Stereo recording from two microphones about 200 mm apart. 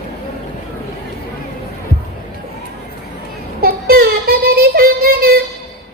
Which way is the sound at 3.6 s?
50° right (ahead or behind).